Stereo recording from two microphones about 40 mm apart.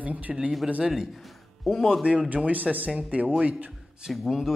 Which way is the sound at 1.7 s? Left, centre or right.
Centre.